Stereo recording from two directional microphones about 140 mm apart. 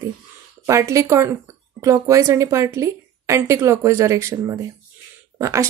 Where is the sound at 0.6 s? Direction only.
20° right (ahead or behind).